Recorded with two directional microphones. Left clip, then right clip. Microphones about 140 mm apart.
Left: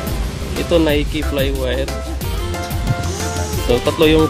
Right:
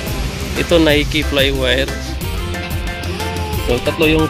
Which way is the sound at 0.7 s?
Centre (ahead or behind).